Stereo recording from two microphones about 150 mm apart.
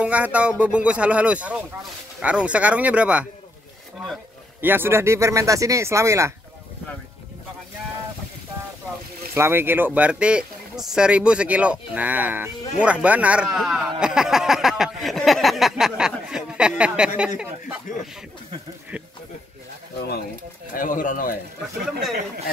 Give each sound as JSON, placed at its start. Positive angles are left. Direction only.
{"t": 0.0, "sound": "speech", "side_deg": -10}
{"t": 4.6, "sound": "speech", "side_deg": -15}
{"t": 9.3, "sound": "speech", "side_deg": -15}
{"t": 17.9, "sound": "speech", "side_deg": 60}
{"t": 20.7, "sound": "speech", "side_deg": 65}